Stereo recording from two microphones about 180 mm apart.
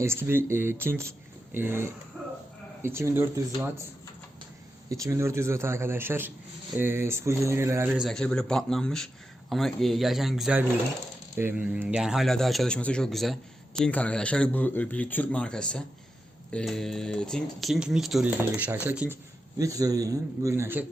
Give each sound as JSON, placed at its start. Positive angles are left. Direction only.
{"t": 0.0, "sound": "a man's voice", "side_deg": -15}
{"t": 4.9, "sound": "a man's voice", "side_deg": -15}
{"t": 7.9, "sound": "speech", "side_deg": 0}